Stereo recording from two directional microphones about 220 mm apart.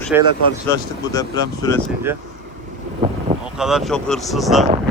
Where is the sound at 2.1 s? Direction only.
10° right (ahead or behind).